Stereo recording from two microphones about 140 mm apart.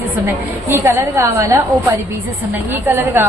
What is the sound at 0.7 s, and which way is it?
A woman's voice, 20° right (ahead or behind).